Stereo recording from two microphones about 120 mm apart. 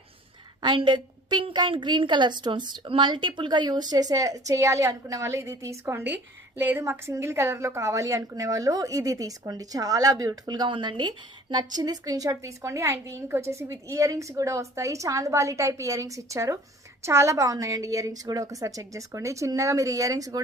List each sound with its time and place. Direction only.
0.6 s a woman's voice: 40° right (ahead or behind)